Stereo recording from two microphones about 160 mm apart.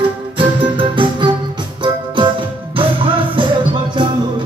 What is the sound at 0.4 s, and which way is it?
Music, 35° right (ahead or behind).